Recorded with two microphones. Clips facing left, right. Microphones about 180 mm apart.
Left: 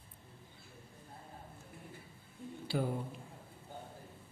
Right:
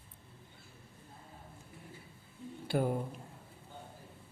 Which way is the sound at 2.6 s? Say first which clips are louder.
Right 4 dB; 55° right (ahead or behind).